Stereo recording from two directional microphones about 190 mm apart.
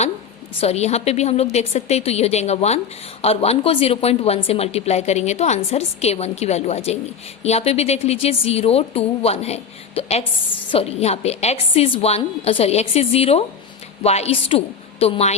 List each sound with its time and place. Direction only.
0.6 s a woman's voice: 35° left (ahead or behind)